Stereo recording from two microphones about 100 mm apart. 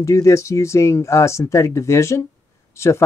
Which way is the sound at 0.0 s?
30° left (ahead or behind).